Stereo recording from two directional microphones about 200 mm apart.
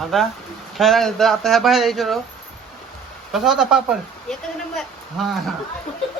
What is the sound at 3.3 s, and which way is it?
A man's voice, centre (ahead or behind).